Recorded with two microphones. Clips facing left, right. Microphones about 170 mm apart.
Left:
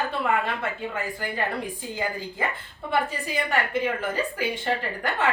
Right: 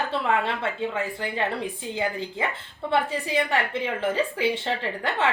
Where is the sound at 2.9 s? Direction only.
30° right (ahead or behind).